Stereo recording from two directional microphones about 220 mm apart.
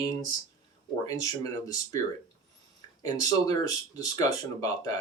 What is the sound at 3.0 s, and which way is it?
Speech, 15° left (ahead or behind).